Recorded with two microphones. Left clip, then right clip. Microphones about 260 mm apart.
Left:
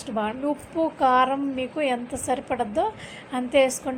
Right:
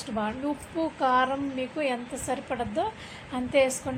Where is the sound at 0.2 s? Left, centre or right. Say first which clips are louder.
Left 4 dB; centre.